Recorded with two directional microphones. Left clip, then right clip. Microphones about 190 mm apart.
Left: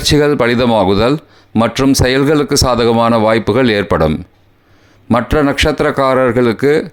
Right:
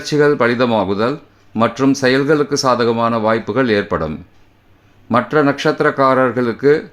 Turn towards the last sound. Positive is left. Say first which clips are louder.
# left 2 dB
turn(degrees=35)  # may be behind; listen again after turning